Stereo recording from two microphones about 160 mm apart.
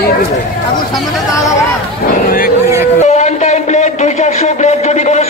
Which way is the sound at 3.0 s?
45° left (ahead or behind).